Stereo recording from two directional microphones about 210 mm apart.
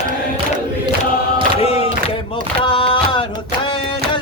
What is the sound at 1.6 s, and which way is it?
Crowd, 25° left (ahead or behind).